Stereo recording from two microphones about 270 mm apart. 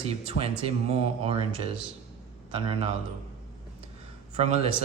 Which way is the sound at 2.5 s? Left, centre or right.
Right.